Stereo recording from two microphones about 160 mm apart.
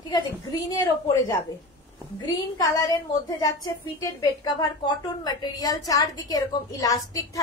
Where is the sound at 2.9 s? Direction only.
25° left (ahead or behind).